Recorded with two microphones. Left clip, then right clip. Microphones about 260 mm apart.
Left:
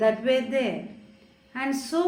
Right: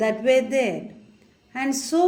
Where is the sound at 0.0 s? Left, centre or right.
Right.